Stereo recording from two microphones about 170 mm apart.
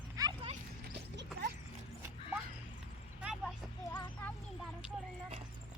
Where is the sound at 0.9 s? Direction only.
85° right.